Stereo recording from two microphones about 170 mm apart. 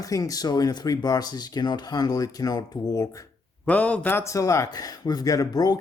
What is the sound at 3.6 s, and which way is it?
Speech, 10° left (ahead or behind).